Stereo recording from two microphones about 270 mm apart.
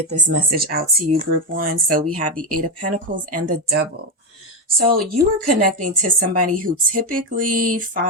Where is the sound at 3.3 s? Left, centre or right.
Right.